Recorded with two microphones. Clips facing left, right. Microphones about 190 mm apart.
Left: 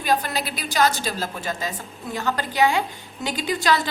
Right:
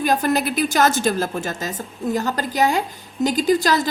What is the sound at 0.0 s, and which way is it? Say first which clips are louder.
A woman's voice: right 5 dB; 45° right (ahead or behind).